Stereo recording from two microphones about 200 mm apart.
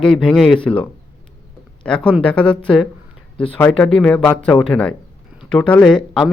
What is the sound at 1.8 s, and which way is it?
Speech, 5° left (ahead or behind).